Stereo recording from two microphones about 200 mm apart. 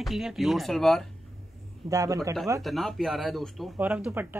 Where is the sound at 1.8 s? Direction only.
15° right (ahead or behind).